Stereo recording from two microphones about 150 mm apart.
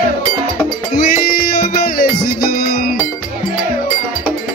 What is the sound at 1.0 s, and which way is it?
Music, 70° left (ahead or behind).